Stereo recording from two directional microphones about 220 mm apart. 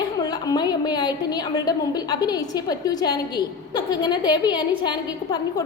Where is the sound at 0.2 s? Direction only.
15° left (ahead or behind).